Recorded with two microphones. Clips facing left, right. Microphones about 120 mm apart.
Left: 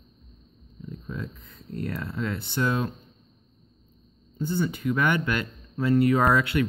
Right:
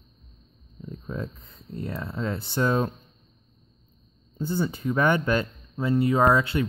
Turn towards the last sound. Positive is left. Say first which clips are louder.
# right 1 dB
turn(degrees=-25)  # may be behind; listen again after turning